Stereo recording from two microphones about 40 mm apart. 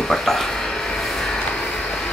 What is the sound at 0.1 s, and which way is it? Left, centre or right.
Speech, centre.